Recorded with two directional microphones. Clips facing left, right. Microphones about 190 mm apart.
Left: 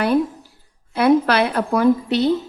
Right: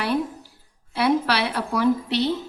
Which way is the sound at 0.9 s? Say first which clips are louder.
Left 6 dB; 50° left (ahead or behind).